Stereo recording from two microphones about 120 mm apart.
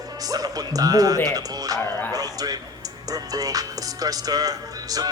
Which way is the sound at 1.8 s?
15° left (ahead or behind).